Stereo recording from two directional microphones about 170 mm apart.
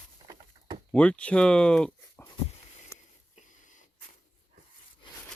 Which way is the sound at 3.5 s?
45° left (ahead or behind).